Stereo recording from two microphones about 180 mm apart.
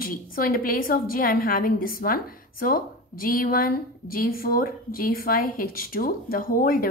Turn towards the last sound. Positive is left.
turn(degrees=50)  # may be behind; listen again after turning